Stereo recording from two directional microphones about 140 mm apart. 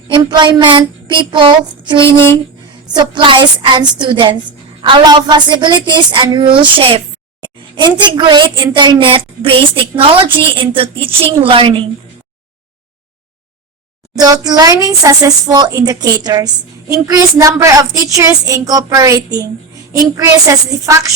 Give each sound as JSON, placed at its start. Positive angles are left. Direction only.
{"t": 0.1, "sound": "a woman's voice", "side_deg": -35}
{"t": 14.2, "sound": "a woman's voice", "side_deg": -30}